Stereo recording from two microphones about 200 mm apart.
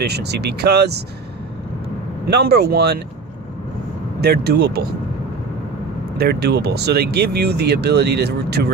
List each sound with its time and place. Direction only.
0.0 s speech: 55° right (ahead or behind)
2.3 s speech: 50° right (ahead or behind)
4.2 s speech: 55° right (ahead or behind)
6.1 s speech: 50° right (ahead or behind)